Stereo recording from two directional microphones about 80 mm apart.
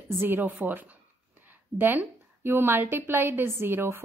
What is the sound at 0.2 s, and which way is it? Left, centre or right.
A woman's voice, right.